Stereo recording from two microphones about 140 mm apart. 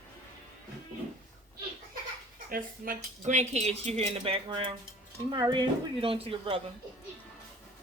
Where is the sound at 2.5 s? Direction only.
90° right; by 6.6 s 45° right (ahead or behind).